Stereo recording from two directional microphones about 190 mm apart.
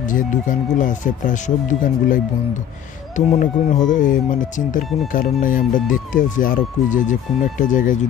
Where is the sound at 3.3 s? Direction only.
40° left (ahead or behind).